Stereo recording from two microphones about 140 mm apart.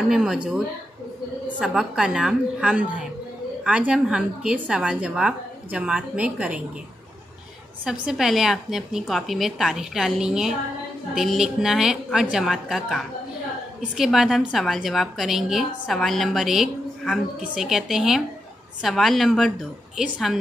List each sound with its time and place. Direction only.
0.1 s a woman's voice: 5° right (ahead or behind)
1.6 s a woman's voice: 5° right (ahead or behind)
7.8 s a woman's voice: 5° right (ahead or behind)